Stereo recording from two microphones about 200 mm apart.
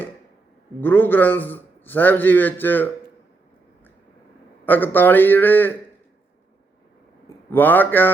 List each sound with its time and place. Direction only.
0.8 s a man's voice: 10° left (ahead or behind)
4.6 s a man's voice: 10° left (ahead or behind)
7.5 s a man's voice: 10° left (ahead or behind)